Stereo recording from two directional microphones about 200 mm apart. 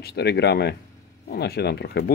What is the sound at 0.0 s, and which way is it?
Speech, 55° left (ahead or behind).